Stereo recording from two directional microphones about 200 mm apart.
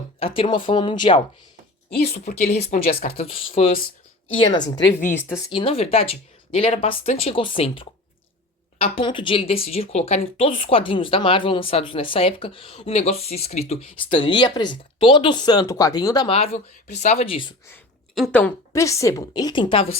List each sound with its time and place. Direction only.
0.2 s speech: 25° left (ahead or behind)
2.6 s speech: 30° left (ahead or behind)
16.3 s speech: 30° left (ahead or behind)
18.1 s a woman's voice: 5° left (ahead or behind); by 20.0 s 30° left (ahead or behind)